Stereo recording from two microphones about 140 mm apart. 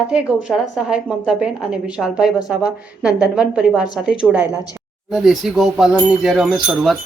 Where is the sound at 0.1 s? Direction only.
5° right (ahead or behind).